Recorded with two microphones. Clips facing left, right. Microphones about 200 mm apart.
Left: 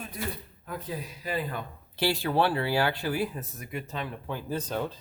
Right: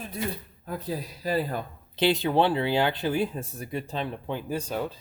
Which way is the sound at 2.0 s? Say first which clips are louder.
Right 3 dB; 20° right (ahead or behind).